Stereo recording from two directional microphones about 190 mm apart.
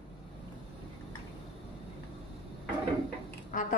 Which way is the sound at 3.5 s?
45° left (ahead or behind).